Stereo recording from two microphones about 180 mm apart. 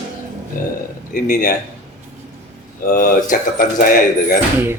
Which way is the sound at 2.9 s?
50° left (ahead or behind).